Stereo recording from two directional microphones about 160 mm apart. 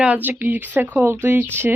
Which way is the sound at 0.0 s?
10° right (ahead or behind).